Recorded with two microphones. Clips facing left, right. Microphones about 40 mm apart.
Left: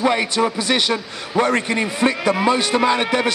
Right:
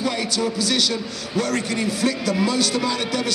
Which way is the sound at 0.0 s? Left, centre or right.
Left.